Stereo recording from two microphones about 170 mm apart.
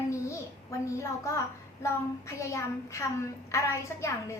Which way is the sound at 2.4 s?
15° left (ahead or behind).